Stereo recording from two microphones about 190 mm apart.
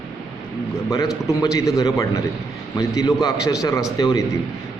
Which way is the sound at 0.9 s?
20° left (ahead or behind).